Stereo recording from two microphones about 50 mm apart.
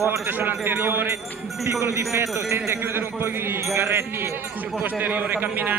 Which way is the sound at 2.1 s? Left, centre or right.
Right.